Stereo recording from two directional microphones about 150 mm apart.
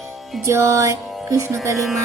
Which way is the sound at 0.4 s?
20° right (ahead or behind).